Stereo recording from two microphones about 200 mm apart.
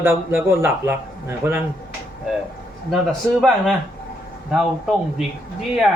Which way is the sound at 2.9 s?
Centre (ahead or behind).